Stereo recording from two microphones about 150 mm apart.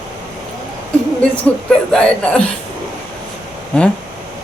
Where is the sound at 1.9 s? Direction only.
5° left (ahead or behind).